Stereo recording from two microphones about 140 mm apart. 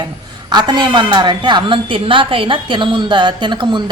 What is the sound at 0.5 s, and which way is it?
A woman's voice, 30° right (ahead or behind).